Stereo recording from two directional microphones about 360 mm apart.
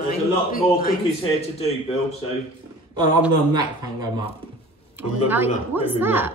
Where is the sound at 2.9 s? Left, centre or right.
Centre.